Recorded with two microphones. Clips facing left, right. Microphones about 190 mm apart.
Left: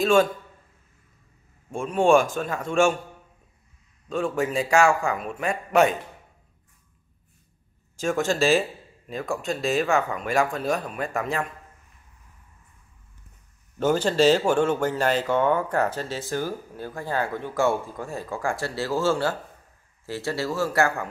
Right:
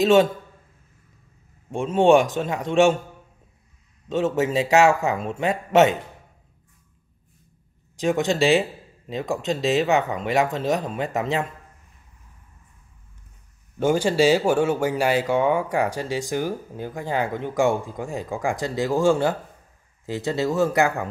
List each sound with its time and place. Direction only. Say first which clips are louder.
0.0 s speech: right 3 dB; 20° right (ahead or behind)
1.7 s speech: right 3 dB; 20° right (ahead or behind)
4.1 s speech: right 3 dB; 20° right (ahead or behind)
7.9 s speech: right 3 dB; 20° right (ahead or behind)
13.7 s speech: right 2 dB; 10° right (ahead or behind)